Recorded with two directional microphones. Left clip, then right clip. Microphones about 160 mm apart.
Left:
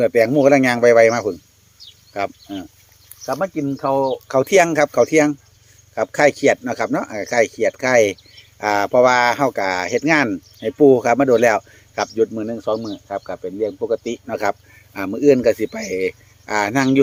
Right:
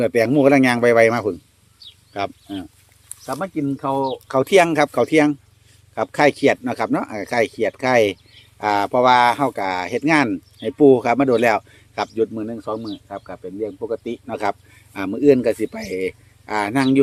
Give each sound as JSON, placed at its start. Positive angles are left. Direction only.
{"t": 0.0, "sound": "speech", "side_deg": -15}
{"t": 14.3, "sound": "speech", "side_deg": 0}